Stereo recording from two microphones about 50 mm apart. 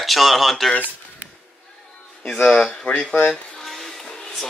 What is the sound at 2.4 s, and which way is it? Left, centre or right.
Speech, centre.